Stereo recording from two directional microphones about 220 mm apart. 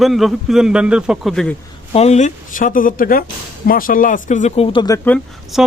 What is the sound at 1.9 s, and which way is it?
Speech, 30° left (ahead or behind).